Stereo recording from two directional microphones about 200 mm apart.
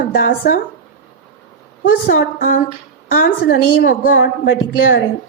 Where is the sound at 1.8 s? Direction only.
45° left (ahead or behind).